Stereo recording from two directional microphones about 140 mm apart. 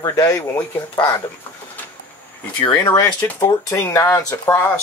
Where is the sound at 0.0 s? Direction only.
25° left (ahead or behind).